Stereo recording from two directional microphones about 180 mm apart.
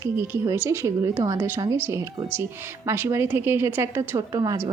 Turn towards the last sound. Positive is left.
turn(degrees=-20)  # may be behind; listen again after turning